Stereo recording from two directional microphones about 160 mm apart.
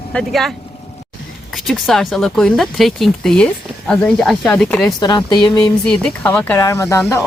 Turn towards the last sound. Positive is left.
turn(degrees=20)  # may be behind; listen again after turning